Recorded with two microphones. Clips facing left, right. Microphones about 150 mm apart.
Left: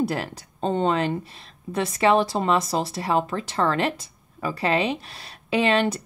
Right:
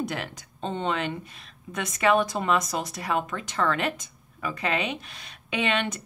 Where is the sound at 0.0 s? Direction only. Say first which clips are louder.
Left 6 dB; 35° left (ahead or behind).